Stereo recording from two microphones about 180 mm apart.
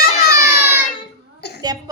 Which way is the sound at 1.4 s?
65° left (ahead or behind).